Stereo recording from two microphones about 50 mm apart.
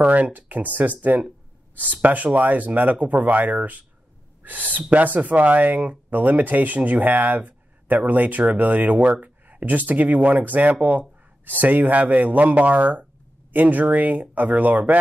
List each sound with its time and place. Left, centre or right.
0.0 s speech: right